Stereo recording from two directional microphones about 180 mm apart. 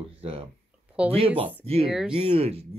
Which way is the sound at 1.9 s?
5° right (ahead or behind).